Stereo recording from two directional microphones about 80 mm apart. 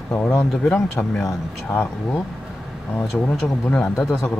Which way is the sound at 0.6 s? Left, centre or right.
Centre.